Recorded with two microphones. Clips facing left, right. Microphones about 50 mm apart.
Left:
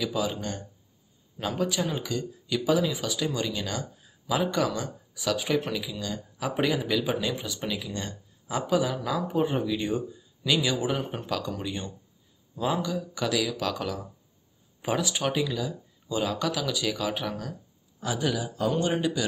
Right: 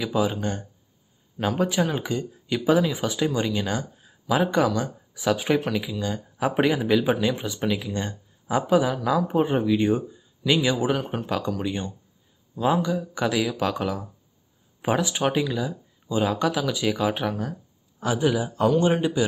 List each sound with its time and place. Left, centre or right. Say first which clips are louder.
0.0 s speech: right 5 dB; right
5.9 s speech: right 6 dB; right
10.4 s speech: right 4 dB; centre
12.5 s speech: right 5 dB; centre